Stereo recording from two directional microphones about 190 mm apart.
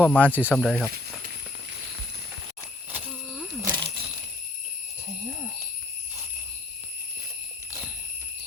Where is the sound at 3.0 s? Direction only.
5° left (ahead or behind).